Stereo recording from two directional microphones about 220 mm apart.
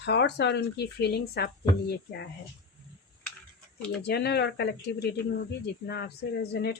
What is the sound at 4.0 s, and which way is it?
Speech, 45° left (ahead or behind).